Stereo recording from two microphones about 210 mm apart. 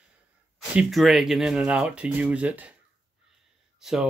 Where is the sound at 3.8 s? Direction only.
Centre (ahead or behind).